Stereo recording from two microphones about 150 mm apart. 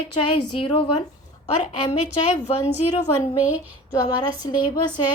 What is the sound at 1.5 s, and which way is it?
A woman's voice, 45° left (ahead or behind).